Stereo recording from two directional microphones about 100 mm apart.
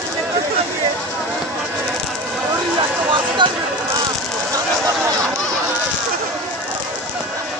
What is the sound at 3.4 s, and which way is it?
Basketball bounce, 55° right (ahead or behind).